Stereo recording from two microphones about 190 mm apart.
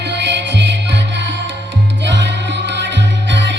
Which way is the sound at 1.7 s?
70° right (ahead or behind).